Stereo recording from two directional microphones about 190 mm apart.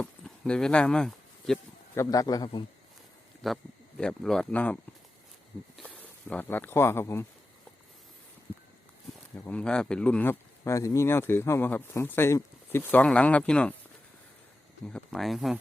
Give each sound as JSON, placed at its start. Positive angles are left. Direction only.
{"t": 0.0, "sound": "a sound", "side_deg": 5}
{"t": 2.0, "sound": "a man's voice", "side_deg": 20}
{"t": 3.4, "sound": "speech", "side_deg": 5}
{"t": 9.4, "sound": "speech", "side_deg": 5}
{"t": 14.8, "sound": "speech", "side_deg": 5}